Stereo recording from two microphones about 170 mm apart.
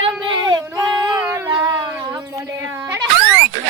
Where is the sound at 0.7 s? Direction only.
20° right (ahead or behind).